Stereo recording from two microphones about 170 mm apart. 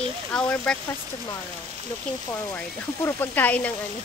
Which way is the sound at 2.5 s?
10° left (ahead or behind).